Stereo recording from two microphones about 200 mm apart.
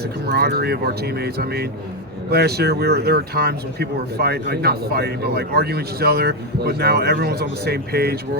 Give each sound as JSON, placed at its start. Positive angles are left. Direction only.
{"t": 0.3, "sound": "speech", "side_deg": -55}